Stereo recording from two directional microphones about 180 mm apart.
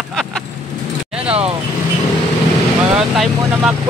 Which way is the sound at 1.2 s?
35° right (ahead or behind).